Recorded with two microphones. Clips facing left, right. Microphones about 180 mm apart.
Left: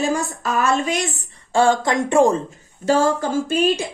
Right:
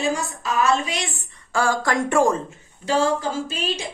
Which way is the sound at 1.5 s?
25° left (ahead or behind).